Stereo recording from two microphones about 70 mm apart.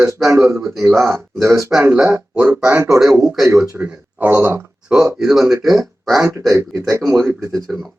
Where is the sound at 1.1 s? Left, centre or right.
Right.